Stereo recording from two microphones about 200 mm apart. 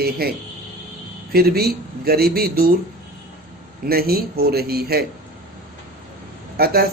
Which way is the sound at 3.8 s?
50° right (ahead or behind).